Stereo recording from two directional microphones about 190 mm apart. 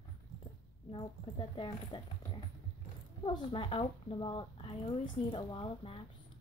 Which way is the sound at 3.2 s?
25° left (ahead or behind).